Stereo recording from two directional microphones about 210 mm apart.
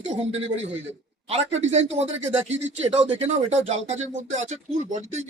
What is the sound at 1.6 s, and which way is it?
Speech, 30° right (ahead or behind).